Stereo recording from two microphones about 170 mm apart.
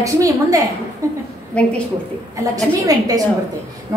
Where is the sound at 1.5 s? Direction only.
5° left (ahead or behind).